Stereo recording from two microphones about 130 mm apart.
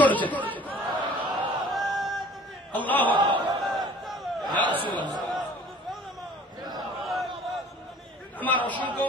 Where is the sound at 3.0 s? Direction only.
40° right (ahead or behind).